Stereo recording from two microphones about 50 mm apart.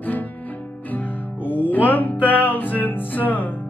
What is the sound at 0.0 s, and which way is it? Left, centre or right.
Music, left.